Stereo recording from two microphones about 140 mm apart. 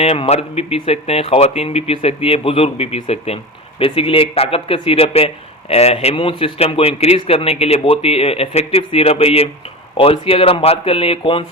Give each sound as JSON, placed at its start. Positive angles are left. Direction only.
{"t": 0.0, "sound": "speech", "side_deg": 45}